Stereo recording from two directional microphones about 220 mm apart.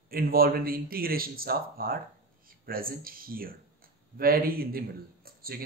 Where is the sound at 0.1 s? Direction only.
45° right (ahead or behind).